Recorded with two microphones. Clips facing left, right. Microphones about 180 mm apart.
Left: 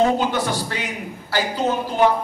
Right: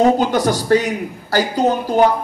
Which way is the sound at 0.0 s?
40° right (ahead or behind).